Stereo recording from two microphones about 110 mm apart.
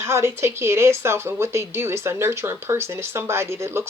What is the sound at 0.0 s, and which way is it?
Speech, 25° right (ahead or behind).